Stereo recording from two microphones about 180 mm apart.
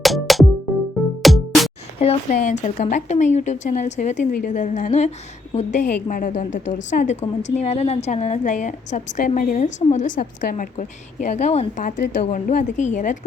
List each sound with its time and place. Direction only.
0.0 s music: centre (ahead or behind)
2.0 s a woman's voice: 40° left (ahead or behind)